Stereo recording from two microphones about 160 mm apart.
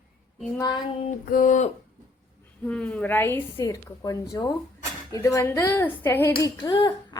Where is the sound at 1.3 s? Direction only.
55° left (ahead or behind).